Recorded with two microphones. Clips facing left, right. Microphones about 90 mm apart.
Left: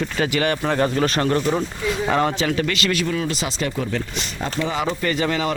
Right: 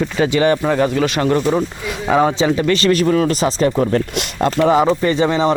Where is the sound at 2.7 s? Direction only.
40° right (ahead or behind).